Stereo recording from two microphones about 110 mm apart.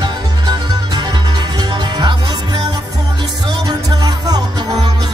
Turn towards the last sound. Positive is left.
turn(degrees=-35)  # may be behind; listen again after turning